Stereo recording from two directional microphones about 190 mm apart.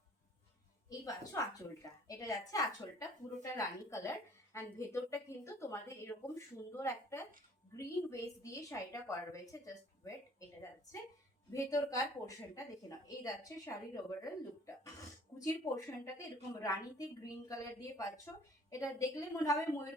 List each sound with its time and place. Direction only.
0.9 s a woman's voice: 20° left (ahead or behind)
11.5 s a woman's voice: 15° left (ahead or behind)
15.4 s a woman's voice: 15° left (ahead or behind)
18.7 s a woman's voice: 15° left (ahead or behind)